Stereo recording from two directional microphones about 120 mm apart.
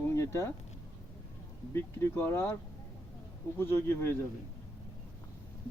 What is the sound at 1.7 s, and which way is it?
Speech, 20° left (ahead or behind).